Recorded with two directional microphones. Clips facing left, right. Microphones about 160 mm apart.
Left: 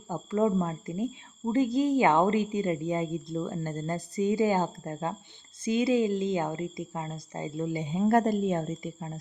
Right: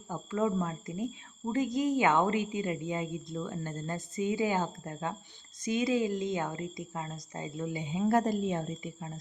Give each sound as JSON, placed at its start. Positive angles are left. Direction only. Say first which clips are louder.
{"t": 0.1, "sound": "a woman's voice", "louder": "left 4 dB", "side_deg": 35}